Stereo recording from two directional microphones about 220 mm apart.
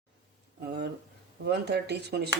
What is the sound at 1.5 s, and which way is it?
Speech, 50° right (ahead or behind).